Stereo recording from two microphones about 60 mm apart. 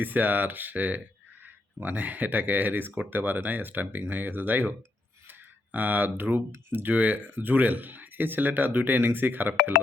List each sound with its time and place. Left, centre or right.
0.0 s speech: right
5.3 s a sound: right
6.7 s speech: right